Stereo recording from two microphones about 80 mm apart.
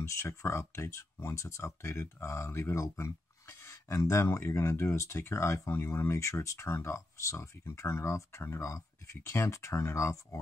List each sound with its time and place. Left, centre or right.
0.0 s speech: left